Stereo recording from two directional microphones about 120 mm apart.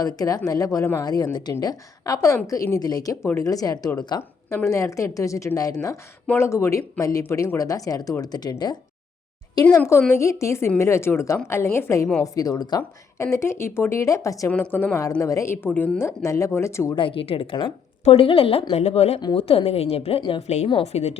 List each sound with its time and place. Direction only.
0.0 s a woman's voice: 30° left (ahead or behind)
4.2 s a woman's voice: 20° left (ahead or behind); by 8.8 s 35° left (ahead or behind)
10.1 s speech: 25° left (ahead or behind)
14.5 s a woman's voice: 15° left (ahead or behind)
15.2 s speech: 25° left (ahead or behind)
16.9 s speech: 45° left (ahead or behind)
18.7 s a woman's voice: 60° left (ahead or behind)
19.2 s a woman's voice: 50° left (ahead or behind)
20.8 s a woman's voice: 60° left (ahead or behind)